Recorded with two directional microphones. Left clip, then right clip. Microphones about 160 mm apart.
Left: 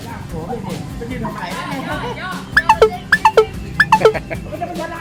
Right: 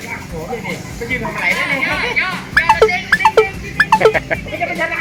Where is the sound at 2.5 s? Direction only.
Centre (ahead or behind).